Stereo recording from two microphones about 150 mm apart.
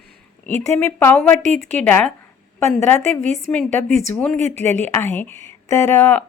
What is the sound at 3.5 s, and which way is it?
A woman's voice, 10° left (ahead or behind).